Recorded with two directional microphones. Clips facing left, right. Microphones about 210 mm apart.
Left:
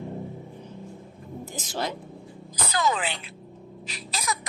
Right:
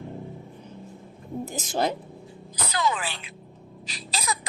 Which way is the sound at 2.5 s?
45° left (ahead or behind).